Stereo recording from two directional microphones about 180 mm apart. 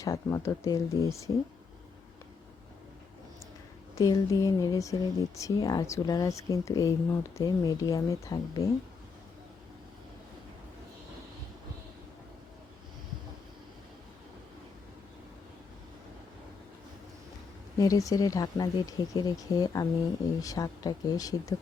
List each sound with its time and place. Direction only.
0.0 s speech: 15° left (ahead or behind)
3.9 s speech: 20° left (ahead or behind)
17.7 s speech: 20° left (ahead or behind)